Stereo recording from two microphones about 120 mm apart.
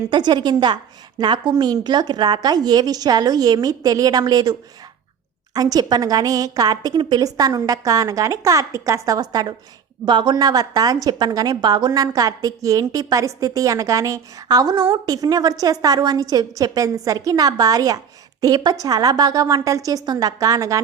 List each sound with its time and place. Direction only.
0.1 s a woman's voice: 40° right (ahead or behind)
5.5 s a woman's voice: 30° right (ahead or behind)